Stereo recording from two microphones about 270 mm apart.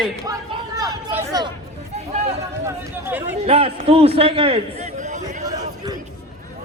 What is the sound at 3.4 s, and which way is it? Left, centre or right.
A man's voice, right.